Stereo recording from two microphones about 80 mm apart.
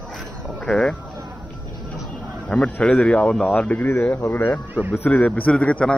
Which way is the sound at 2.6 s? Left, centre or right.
Centre.